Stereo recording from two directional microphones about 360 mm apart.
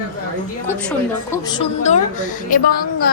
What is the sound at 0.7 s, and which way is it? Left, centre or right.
A woman's voice, centre.